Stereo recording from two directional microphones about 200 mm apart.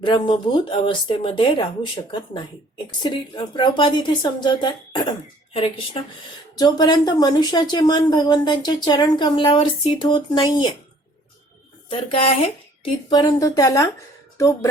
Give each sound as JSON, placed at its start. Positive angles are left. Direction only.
{"t": 0.0, "sound": "a woman's voice", "side_deg": 25}
{"t": 3.0, "sound": "a woman's voice", "side_deg": 20}
{"t": 6.6, "sound": "a woman's voice", "side_deg": 20}
{"t": 11.9, "sound": "a woman's voice", "side_deg": 25}